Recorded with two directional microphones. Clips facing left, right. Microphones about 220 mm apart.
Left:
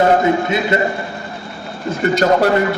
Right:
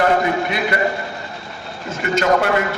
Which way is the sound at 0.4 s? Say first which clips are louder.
Left 4 dB; 25° left (ahead or behind).